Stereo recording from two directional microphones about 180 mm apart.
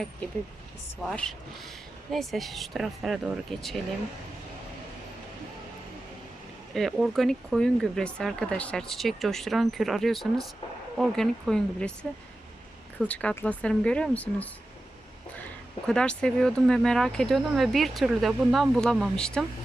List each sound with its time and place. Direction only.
1.1 s speech: 5° left (ahead or behind)
6.7 s speech: centre (ahead or behind)
13.0 s speech: 5° left (ahead or behind)
15.9 s speech: 5° left (ahead or behind)